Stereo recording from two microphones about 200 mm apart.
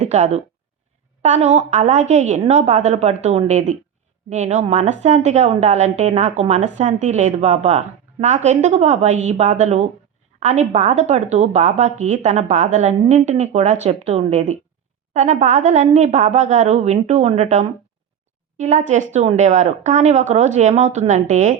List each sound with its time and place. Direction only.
0.0 s speech: 35° right (ahead or behind)